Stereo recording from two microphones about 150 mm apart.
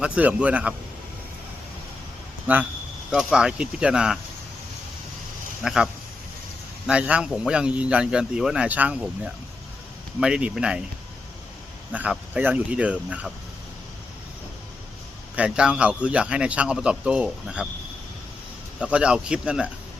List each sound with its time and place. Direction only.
0.0 s a man's voice: 10° right (ahead or behind)
2.5 s a man's voice: 10° right (ahead or behind)
5.6 s a man's voice: 5° right (ahead or behind)
11.9 s a man's voice: 10° right (ahead or behind)
15.4 s a man's voice: 5° right (ahead or behind)
18.8 s a man's voice: 5° right (ahead or behind)